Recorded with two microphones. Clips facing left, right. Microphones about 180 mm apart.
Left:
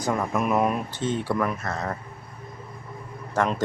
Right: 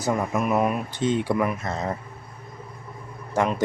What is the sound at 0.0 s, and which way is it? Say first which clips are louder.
Speech: right 1 dB; 5° right (ahead or behind).